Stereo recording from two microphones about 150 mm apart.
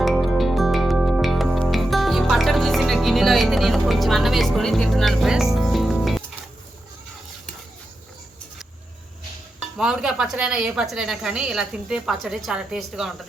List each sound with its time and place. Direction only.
0.0 s music: centre (ahead or behind)
9.6 s speech: 5° right (ahead or behind)